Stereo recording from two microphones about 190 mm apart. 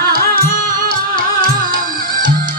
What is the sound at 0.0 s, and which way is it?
Music, 50° right (ahead or behind).